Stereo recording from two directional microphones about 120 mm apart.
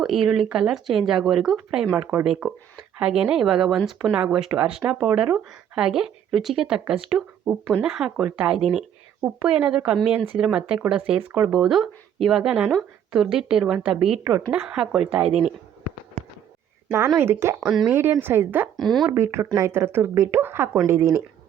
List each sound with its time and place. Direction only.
0.0 s a woman's voice: 5° right (ahead or behind)
17.2 s speech: 20° right (ahead or behind)
17.6 s speech: centre (ahead or behind)
17.8 s a woman's voice: 15° right (ahead or behind)
18.8 s speech: 5° left (ahead or behind)
19.1 s speech: 20° right (ahead or behind)